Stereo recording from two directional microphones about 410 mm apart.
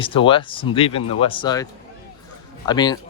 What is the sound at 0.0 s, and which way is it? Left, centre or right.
Speech, centre.